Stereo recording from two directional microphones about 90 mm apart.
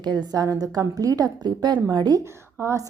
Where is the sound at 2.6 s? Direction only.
30° right (ahead or behind).